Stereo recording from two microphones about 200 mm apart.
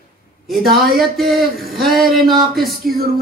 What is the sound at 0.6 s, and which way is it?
Speech, 50° right (ahead or behind).